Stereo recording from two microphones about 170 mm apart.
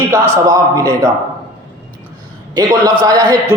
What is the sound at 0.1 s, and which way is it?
Speech, 20° right (ahead or behind).